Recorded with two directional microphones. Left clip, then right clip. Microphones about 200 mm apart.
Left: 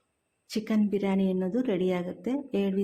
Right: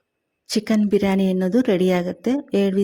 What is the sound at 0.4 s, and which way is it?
Speech, 40° right (ahead or behind).